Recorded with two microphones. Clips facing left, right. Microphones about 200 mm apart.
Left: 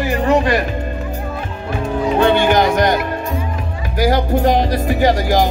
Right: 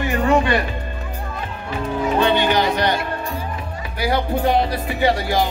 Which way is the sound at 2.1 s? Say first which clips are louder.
Left 5 dB; 50° left (ahead or behind).